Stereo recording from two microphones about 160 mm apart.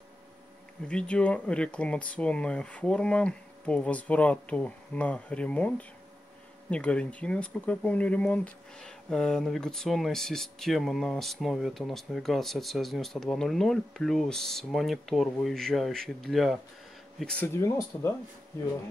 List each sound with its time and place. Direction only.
0.8 s speech: 5° left (ahead or behind)
17.6 s speech: 15° left (ahead or behind)